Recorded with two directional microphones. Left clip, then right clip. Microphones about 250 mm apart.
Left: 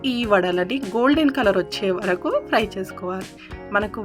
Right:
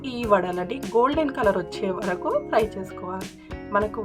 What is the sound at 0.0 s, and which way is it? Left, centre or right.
Speech, centre.